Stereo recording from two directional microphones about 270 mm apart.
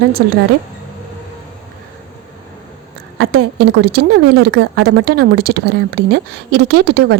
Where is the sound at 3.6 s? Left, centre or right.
Right.